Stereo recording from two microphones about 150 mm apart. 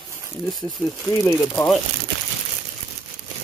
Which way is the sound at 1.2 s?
15° left (ahead or behind).